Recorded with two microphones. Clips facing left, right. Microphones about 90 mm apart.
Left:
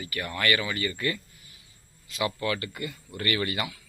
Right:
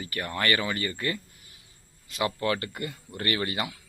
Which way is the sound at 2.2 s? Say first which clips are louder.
Right 1 dB; 40° right (ahead or behind).